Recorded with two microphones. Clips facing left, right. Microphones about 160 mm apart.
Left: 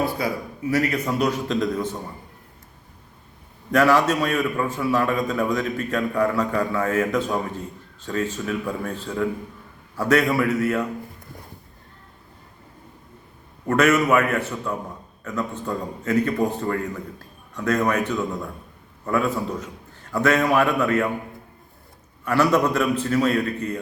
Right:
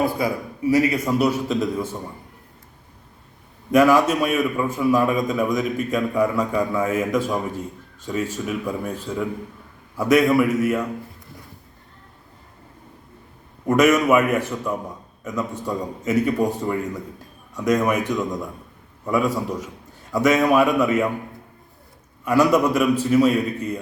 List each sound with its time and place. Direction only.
0.7 s a man's voice: 10° right (ahead or behind)
3.7 s a man's voice: 10° right (ahead or behind)
13.7 s a man's voice: 10° right (ahead or behind)
22.2 s a man's voice: 15° right (ahead or behind)